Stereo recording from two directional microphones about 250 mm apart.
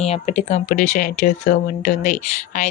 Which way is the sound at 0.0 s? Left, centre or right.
Left.